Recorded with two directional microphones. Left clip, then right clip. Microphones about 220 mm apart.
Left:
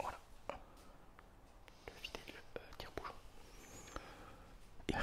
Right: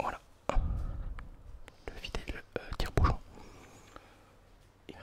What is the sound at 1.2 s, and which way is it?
Whispering, 45° right (ahead or behind).